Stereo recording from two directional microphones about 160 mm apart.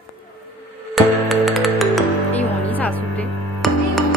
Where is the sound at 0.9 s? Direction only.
Centre (ahead or behind).